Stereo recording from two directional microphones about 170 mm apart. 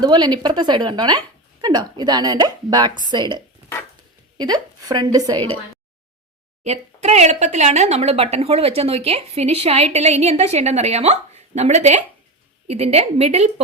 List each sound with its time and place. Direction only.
0.0 s a woman's voice: 25° right (ahead or behind)
6.7 s speech: 40° right (ahead or behind)